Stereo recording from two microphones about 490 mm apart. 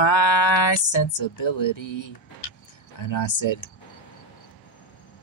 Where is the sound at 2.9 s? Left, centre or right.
Left.